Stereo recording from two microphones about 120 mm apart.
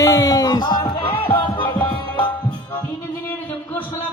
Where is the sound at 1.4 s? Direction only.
45° left (ahead or behind).